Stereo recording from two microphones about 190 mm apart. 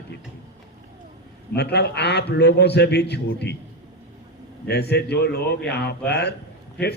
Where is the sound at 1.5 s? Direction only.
60° left (ahead or behind).